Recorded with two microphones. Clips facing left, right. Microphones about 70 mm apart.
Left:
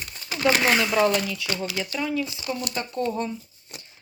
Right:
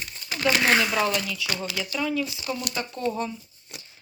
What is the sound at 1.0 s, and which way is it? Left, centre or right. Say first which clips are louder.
Speech: left 4 dB; left.